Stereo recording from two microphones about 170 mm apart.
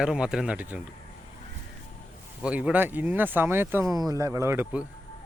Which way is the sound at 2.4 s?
10° right (ahead or behind).